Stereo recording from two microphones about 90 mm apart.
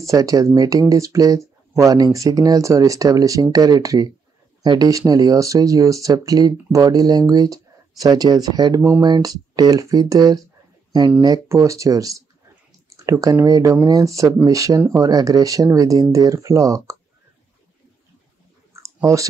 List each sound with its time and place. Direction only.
0.0 s speech: 40° right (ahead or behind)